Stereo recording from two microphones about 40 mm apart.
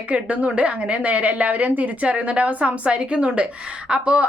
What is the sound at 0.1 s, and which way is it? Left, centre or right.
A woman's voice, right.